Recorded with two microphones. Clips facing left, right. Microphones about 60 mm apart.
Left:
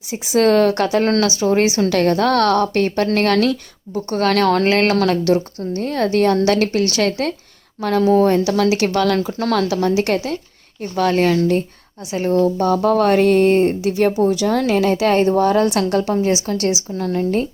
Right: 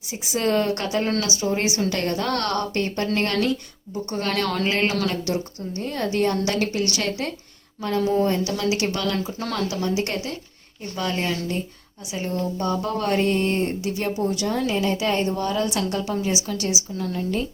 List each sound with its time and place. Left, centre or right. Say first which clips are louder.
0.1 s speech: left 8 dB; left
4.1 s a woman's voice: left 10 dB; left
9.1 s a woman's voice: left 8 dB; left
10.9 s a woman's voice: left 10 dB; left
12.3 s a woman's voice: left 10 dB; left